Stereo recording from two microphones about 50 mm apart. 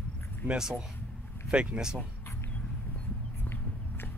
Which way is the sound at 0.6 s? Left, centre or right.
Centre.